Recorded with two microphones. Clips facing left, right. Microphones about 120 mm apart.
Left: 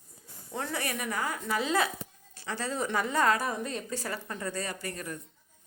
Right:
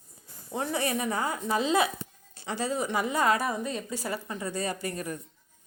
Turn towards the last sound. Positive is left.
turn(degrees=-15)  # may be behind; listen again after turning